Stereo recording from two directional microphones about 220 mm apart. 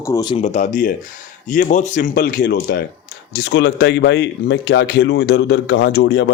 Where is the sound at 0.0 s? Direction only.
15° left (ahead or behind).